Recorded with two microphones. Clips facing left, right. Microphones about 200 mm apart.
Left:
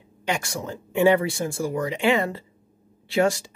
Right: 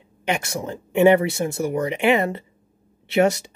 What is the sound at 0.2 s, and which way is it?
Speech, 20° right (ahead or behind).